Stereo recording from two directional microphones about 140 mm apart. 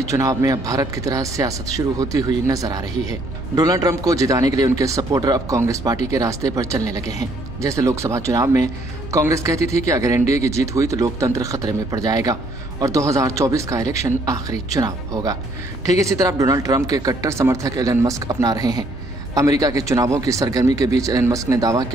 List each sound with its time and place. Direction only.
0.1 s speech: 25° right (ahead or behind)